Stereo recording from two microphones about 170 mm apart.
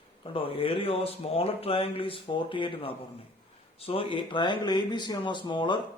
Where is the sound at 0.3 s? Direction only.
35° left (ahead or behind).